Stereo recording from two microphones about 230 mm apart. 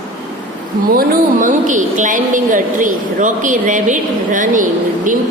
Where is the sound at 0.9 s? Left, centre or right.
Right.